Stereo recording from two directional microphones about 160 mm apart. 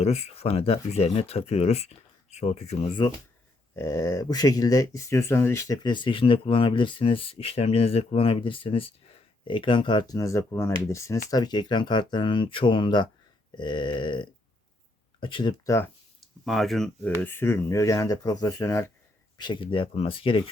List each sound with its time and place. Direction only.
0.0 s speech: 40° left (ahead or behind)
3.8 s speech: 15° left (ahead or behind)
15.6 s speech: 15° left (ahead or behind)
16.2 s speech: centre (ahead or behind); by 18.9 s 20° left (ahead or behind)
19.4 s speech: 30° left (ahead or behind)